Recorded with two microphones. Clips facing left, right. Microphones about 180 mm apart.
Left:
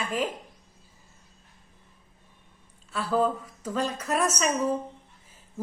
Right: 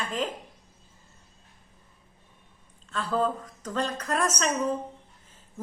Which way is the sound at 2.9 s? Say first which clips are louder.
Left 2 dB; 10° left (ahead or behind).